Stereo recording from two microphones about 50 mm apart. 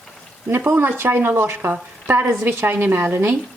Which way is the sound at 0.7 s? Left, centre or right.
Right.